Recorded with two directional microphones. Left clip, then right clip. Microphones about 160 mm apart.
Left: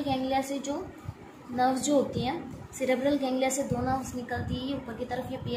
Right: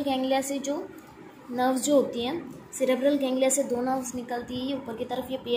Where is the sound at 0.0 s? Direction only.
25° right (ahead or behind).